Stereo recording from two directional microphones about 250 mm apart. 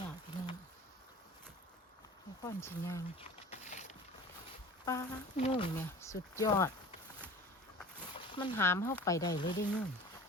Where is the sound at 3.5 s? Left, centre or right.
Left.